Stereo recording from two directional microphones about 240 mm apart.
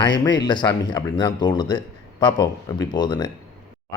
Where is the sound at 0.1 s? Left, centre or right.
Left.